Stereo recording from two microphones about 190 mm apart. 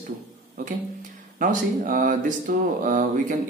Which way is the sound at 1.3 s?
45° right (ahead or behind).